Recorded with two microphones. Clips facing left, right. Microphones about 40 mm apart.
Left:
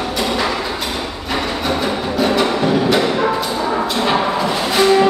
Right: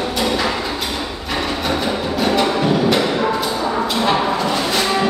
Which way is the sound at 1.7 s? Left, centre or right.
Centre.